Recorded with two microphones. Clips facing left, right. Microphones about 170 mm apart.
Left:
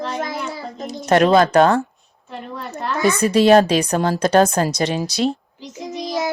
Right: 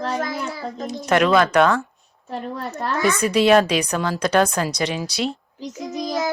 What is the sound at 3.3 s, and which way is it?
Speech, 40° left (ahead or behind).